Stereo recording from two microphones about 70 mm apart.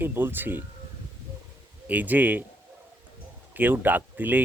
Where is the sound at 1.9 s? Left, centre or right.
Right.